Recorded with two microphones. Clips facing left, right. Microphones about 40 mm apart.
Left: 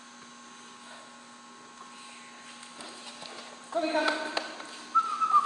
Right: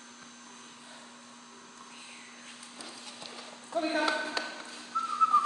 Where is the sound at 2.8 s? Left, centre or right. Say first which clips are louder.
Left 1 dB; centre.